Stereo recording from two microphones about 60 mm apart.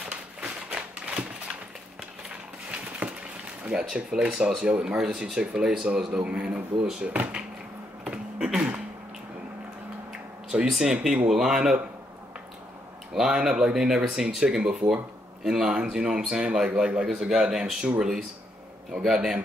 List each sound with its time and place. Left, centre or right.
0.4 s typewriter: right
3.6 s speech: centre
8.0 s a sound: centre
10.1 s speech: centre
13.1 s speech: centre
19.0 s speech: centre